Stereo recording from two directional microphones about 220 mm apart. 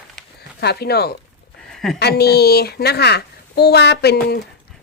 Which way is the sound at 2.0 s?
50° left (ahead or behind).